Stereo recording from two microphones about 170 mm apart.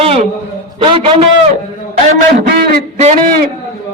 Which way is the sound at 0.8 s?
35° right (ahead or behind).